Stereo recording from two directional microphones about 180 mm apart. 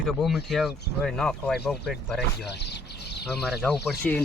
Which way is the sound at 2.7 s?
70° left (ahead or behind).